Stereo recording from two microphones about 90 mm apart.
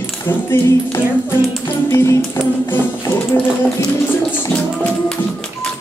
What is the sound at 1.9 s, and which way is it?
Music, 30° left (ahead or behind).